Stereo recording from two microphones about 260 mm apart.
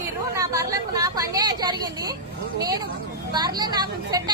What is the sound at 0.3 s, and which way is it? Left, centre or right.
A woman's voice, centre.